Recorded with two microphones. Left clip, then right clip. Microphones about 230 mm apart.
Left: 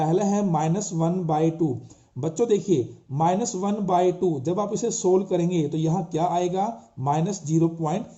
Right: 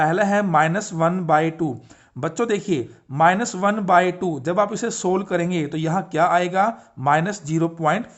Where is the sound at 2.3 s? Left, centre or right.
Right.